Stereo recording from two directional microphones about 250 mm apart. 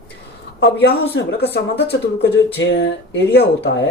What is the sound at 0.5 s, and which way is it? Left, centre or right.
Speech, left.